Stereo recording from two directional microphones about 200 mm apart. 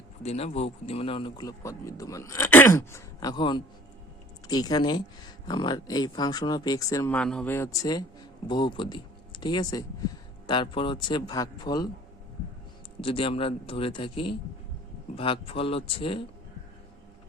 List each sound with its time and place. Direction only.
0.2 s speech: 30° left (ahead or behind)
13.0 s speech: 25° left (ahead or behind)